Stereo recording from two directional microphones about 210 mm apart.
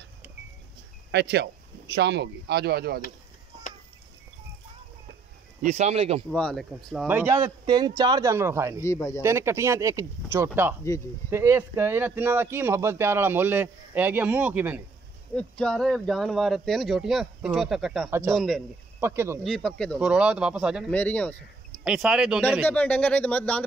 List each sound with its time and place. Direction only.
1.1 s speech: 50° right (ahead or behind)
5.6 s speech: 30° right (ahead or behind)
6.3 s speech: 5° left (ahead or behind)
7.1 s speech: 10° right (ahead or behind)
8.8 s speech: 15° left (ahead or behind)
9.2 s speech: 10° right (ahead or behind)
15.3 s speech: 5° left (ahead or behind)
18.9 s speech: 10° right (ahead or behind)
19.4 s speech: centre (ahead or behind)
20.9 s speech: 5° left (ahead or behind)
22.7 s speech: 5° left (ahead or behind)